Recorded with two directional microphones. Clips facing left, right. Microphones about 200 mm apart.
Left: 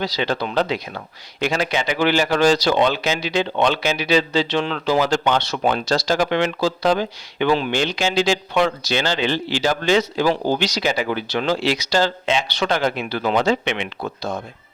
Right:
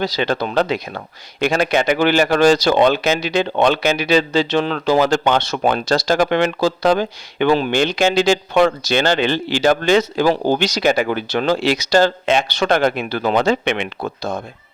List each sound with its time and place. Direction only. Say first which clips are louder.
0.0 s speech: right 3 dB; 50° right (ahead or behind)